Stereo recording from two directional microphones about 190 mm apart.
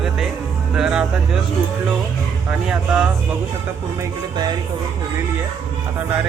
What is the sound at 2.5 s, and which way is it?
Speech, 5° right (ahead or behind).